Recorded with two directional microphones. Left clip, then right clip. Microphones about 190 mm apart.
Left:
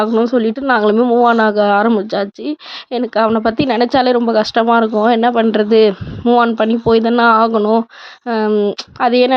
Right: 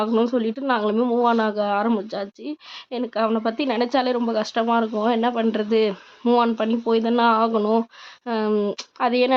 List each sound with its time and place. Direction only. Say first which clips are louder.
0.0 s speech: left 7 dB; 20° left (ahead or behind)